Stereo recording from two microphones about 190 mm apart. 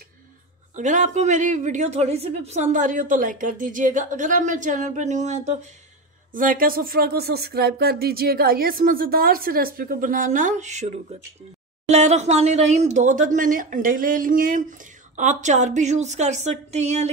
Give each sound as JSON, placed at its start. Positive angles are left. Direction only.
{"t": 0.7, "sound": "speech", "side_deg": -40}